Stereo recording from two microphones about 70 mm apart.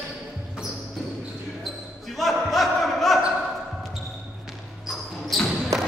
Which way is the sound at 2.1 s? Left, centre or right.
Centre.